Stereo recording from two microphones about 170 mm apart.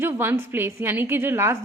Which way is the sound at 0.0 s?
15° right (ahead or behind).